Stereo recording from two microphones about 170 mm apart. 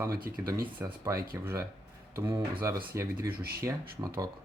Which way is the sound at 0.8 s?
15° right (ahead or behind).